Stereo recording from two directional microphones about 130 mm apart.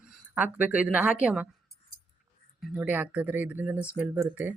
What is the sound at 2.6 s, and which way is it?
Speech, 10° right (ahead or behind).